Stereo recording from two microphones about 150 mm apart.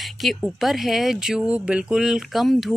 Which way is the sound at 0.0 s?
Centre (ahead or behind).